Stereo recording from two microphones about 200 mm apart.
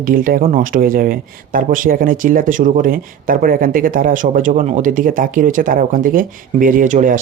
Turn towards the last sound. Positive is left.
turn(degrees=-40)  # may be behind; listen again after turning